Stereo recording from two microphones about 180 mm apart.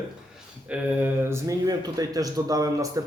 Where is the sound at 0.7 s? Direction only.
10° right (ahead or behind).